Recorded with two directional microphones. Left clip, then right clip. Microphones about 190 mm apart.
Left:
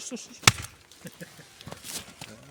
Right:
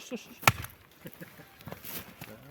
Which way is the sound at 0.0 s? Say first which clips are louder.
Left 2 dB; 20° right (ahead or behind).